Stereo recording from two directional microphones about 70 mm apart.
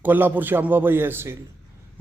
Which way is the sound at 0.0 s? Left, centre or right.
Right.